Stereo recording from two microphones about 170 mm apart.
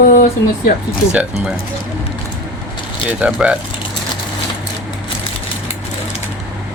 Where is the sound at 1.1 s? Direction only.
5° right (ahead or behind).